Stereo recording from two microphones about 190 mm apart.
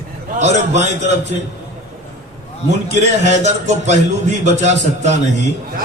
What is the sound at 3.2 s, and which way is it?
A man's voice, 40° right (ahead or behind).